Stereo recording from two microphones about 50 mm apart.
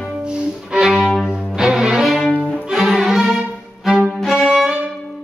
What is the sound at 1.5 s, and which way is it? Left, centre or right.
Cello, centre.